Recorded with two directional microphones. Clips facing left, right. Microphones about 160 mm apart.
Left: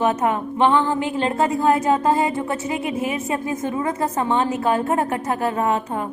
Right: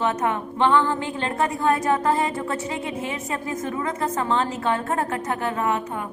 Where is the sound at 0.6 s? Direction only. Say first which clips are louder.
Left 2 dB; 15° left (ahead or behind).